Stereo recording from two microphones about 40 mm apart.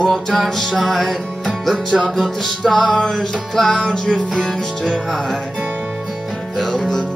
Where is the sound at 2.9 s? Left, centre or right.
Centre.